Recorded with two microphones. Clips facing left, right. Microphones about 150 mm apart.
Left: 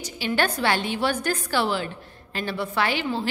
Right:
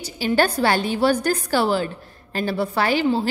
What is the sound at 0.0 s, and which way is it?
A woman's voice, 40° right (ahead or behind).